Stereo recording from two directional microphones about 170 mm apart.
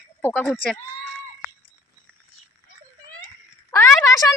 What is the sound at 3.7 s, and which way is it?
Speech, 20° left (ahead or behind).